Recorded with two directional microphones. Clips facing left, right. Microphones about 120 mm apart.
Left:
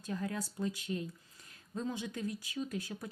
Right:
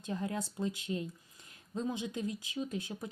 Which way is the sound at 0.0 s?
25° right (ahead or behind).